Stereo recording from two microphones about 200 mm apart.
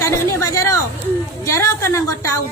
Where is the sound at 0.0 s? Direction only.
15° left (ahead or behind).